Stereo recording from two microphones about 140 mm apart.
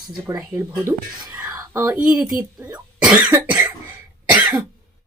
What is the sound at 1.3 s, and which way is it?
Whispering, 10° right (ahead or behind).